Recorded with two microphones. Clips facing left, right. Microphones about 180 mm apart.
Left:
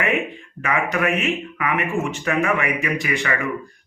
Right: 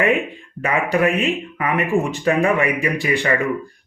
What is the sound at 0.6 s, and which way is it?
Speech, 30° right (ahead or behind).